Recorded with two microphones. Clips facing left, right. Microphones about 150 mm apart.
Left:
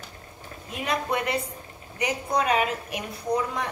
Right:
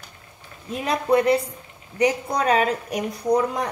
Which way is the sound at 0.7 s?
35° right (ahead or behind).